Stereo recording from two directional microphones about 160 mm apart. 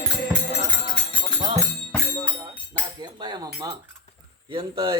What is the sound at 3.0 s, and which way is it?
Chink, 25° right (ahead or behind).